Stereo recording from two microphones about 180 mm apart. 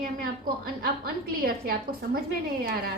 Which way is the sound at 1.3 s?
55° right (ahead or behind).